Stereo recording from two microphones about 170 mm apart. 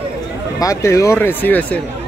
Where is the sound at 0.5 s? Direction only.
20° left (ahead or behind).